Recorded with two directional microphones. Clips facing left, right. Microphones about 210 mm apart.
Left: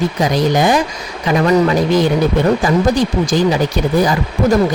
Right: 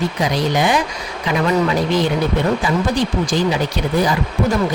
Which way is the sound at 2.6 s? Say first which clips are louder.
Left 5 dB; 45° left (ahead or behind).